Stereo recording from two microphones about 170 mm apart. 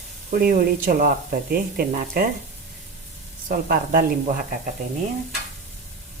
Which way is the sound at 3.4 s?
55° right (ahead or behind).